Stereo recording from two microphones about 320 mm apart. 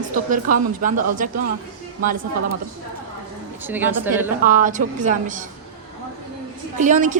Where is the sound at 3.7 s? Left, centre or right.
Centre.